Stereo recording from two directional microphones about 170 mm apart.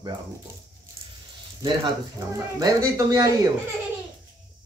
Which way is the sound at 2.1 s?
20° right (ahead or behind).